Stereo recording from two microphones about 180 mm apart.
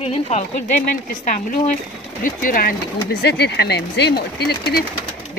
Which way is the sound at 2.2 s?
50° left (ahead or behind).